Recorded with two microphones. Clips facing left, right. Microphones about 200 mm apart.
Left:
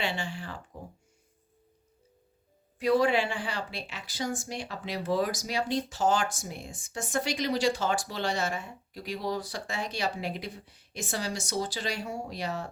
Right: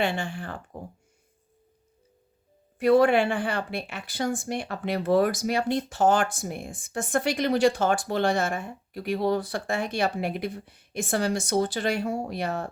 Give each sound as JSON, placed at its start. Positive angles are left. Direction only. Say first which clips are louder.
{"t": 0.0, "sound": "speech", "louder": "right 6 dB", "side_deg": -55}
{"t": 2.7, "sound": "speech", "louder": "right 5 dB", "side_deg": -60}